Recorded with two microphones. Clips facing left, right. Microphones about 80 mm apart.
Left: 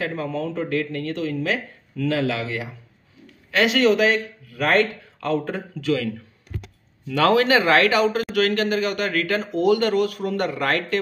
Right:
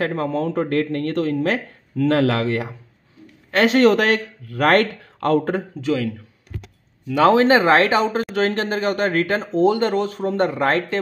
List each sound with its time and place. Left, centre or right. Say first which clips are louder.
0.0 s speech: right 4 dB; right
5.8 s speech: right 1 dB; right